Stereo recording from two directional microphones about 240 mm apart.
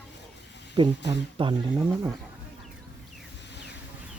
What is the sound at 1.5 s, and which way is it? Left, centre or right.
Speech, centre.